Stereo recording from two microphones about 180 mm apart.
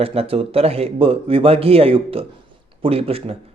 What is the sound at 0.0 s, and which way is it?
A man's voice, 35° right (ahead or behind).